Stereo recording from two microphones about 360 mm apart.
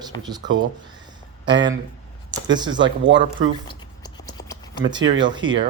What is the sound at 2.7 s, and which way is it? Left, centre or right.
Speech, right.